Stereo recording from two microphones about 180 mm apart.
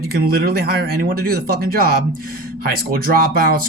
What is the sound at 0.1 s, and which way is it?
Speech, 55° right (ahead or behind).